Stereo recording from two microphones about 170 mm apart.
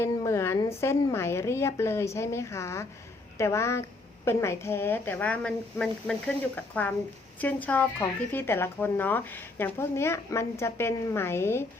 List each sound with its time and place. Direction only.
0.0 s a sound: 15° left (ahead or behind)
0.8 s speech: 15° left (ahead or behind)
7.3 s speech: 10° left (ahead or behind)